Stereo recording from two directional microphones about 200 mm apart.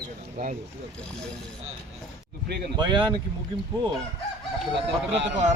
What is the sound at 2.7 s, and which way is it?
Speech, 25° right (ahead or behind).